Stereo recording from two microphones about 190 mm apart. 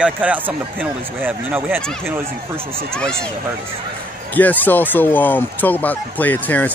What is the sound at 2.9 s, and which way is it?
Speech, 5° left (ahead or behind).